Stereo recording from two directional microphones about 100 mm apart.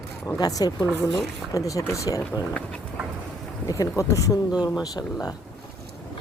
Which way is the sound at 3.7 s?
35° left (ahead or behind).